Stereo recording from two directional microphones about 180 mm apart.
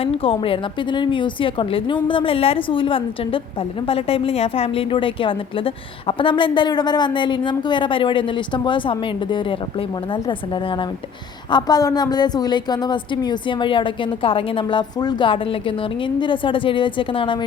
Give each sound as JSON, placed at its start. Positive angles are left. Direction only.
{"t": 0.0, "sound": "a woman's voice", "side_deg": 30}